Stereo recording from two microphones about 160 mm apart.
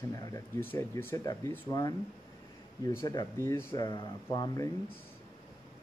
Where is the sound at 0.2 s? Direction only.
15° left (ahead or behind).